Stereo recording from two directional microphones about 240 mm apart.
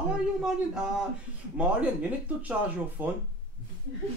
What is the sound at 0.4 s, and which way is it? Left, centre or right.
Speech, centre.